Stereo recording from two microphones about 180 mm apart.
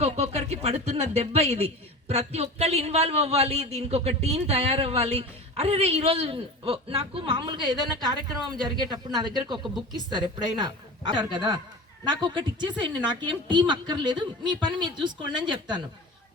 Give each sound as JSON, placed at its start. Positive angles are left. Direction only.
{"t": 0.0, "sound": "a woman's voice", "side_deg": -35}